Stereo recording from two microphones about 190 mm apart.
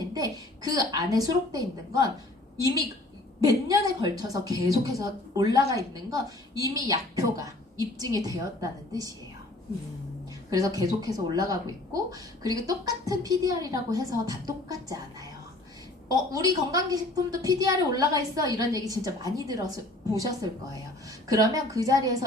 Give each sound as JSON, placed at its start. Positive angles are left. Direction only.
{"t": 0.1, "sound": "a woman's voice", "side_deg": -20}
{"t": 3.4, "sound": "a woman's voice", "side_deg": -20}
{"t": 10.5, "sound": "a woman's voice", "side_deg": -20}
{"t": 16.3, "sound": "a woman's voice", "side_deg": -20}